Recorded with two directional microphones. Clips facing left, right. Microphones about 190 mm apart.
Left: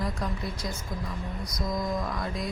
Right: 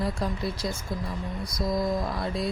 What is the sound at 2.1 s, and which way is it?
Speech, 30° right (ahead or behind).